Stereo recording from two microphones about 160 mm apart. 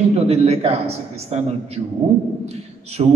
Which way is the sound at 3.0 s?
45° right (ahead or behind).